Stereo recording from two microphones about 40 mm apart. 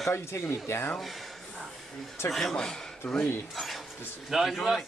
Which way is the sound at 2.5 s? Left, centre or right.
Centre.